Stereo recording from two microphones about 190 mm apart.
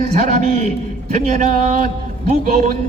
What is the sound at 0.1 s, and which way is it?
A man's voice, 40° right (ahead or behind).